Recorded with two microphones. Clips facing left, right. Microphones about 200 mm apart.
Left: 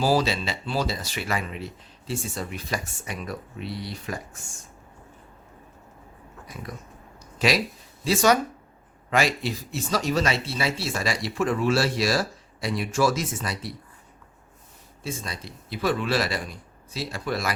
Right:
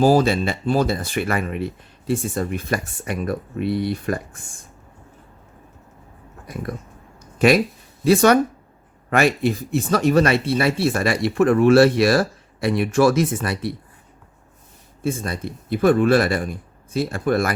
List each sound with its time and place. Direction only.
0.0 s speech: 50° right (ahead or behind)
6.5 s speech: 55° right (ahead or behind)
15.0 s speech: 55° right (ahead or behind)